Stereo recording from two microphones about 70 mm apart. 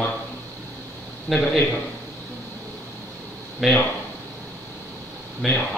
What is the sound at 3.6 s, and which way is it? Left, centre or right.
Speech, centre.